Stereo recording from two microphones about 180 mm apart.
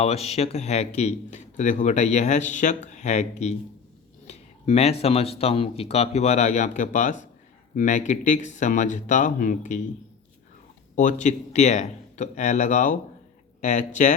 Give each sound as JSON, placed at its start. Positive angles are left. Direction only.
{"t": 0.0, "sound": "speech", "side_deg": 35}
{"t": 10.9, "sound": "speech", "side_deg": 45}